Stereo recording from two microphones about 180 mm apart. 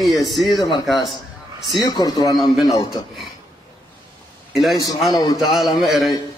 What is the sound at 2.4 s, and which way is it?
Speech, centre (ahead or behind).